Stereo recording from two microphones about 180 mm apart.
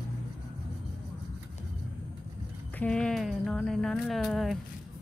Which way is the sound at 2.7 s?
5° left (ahead or behind).